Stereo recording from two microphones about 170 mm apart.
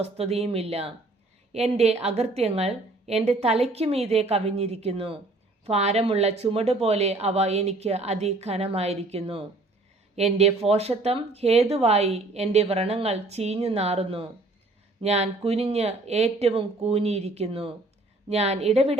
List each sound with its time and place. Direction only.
0.0 s speech: 35° right (ahead or behind)